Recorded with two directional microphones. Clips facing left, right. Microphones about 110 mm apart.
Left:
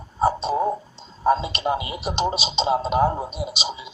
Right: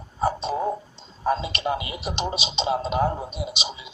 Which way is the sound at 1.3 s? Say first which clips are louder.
Left 4 dB; 30° left (ahead or behind).